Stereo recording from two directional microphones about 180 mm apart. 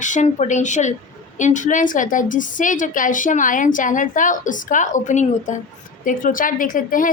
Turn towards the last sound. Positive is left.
turn(degrees=50)  # may be behind; listen again after turning